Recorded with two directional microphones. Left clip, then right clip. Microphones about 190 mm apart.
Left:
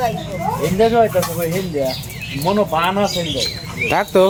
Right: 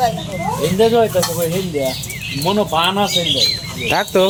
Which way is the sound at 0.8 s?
10° right (ahead or behind).